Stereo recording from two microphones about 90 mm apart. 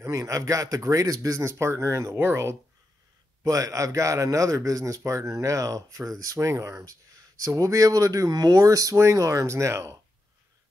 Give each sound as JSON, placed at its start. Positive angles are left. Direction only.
{"t": 0.0, "sound": "a man's voice", "side_deg": -40}
{"t": 3.4, "sound": "a man's voice", "side_deg": -40}